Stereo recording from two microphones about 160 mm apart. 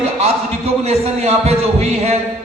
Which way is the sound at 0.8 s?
40° right (ahead or behind).